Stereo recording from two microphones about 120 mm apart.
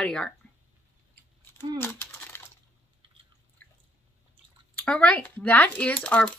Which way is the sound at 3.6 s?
15° left (ahead or behind).